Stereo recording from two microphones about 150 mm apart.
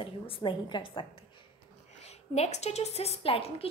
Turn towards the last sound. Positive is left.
turn(degrees=40)  # may be behind; listen again after turning